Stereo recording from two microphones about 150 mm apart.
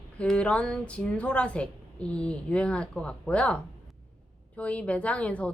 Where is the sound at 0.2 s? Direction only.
5° left (ahead or behind).